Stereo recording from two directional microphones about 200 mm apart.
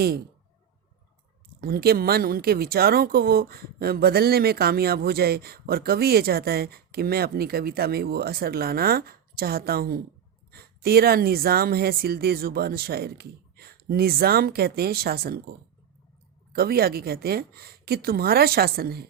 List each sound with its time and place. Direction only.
1.6 s speech: 50° right (ahead or behind)